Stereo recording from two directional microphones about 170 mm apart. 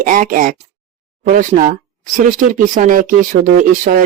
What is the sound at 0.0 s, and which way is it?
Speech, 50° right (ahead or behind).